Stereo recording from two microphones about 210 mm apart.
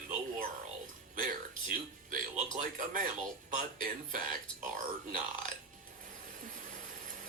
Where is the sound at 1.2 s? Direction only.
40° right (ahead or behind).